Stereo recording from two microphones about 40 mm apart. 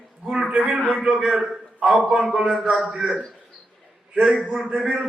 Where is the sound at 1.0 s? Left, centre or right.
Centre.